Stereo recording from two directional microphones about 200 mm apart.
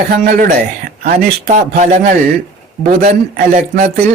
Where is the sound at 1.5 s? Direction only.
40° right (ahead or behind).